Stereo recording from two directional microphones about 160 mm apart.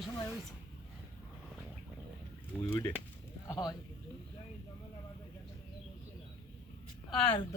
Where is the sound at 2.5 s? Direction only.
5° right (ahead or behind).